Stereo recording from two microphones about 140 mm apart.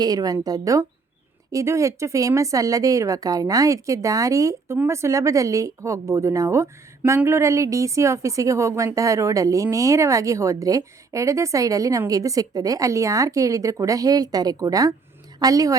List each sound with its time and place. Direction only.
0.0 s speech: 25° right (ahead or behind)